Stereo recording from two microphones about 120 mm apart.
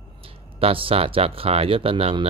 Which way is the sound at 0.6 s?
50° right (ahead or behind).